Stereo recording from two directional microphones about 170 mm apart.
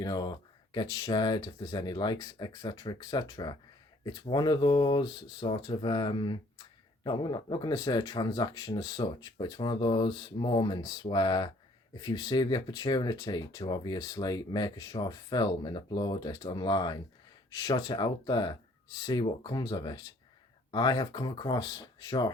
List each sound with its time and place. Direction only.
0.0 s speech: 25° left (ahead or behind)